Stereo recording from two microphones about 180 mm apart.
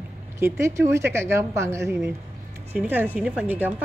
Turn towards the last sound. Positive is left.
turn(degrees=-10)  # may be behind; listen again after turning